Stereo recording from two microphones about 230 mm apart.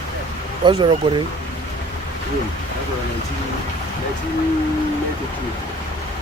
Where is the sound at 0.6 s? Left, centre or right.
Right.